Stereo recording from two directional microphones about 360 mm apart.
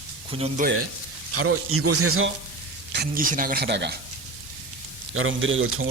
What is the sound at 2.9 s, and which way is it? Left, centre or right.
A man's voice, right.